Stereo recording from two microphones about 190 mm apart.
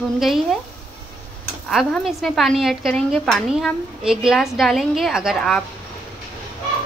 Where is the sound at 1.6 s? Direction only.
Centre (ahead or behind).